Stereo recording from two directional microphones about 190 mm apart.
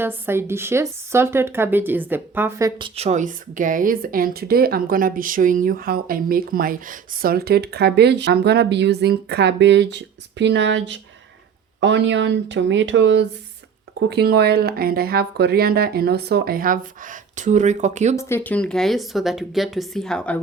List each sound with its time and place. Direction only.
0.0 s a woman's voice: 10° right (ahead or behind); by 13.2 s 70° right (ahead or behind)
14.1 s a woman's voice: 60° right (ahead or behind); by 18.2 s 40° right (ahead or behind)
18.2 s speech: 10° left (ahead or behind)